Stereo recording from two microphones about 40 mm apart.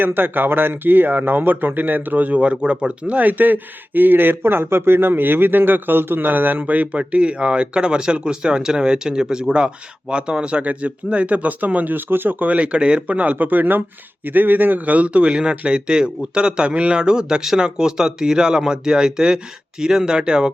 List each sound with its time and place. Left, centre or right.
0.0 s a man's voice: right
2.4 s a man's voice: right
3.2 s a man's voice: right
10.6 s speech: right
12.5 s speech: right
13.3 s a man's voice: right; by 20.5 s centre